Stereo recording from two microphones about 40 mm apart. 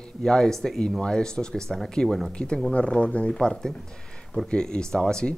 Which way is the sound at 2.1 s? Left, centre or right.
Centre.